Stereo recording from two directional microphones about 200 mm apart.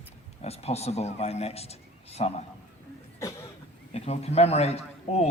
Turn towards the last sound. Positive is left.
turn(degrees=30)  # may be behind; listen again after turning